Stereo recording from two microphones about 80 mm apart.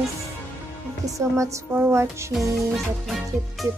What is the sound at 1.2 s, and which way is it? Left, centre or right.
Music, right.